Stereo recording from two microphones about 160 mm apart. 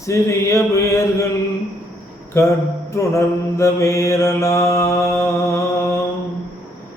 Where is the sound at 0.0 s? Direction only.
20° left (ahead or behind).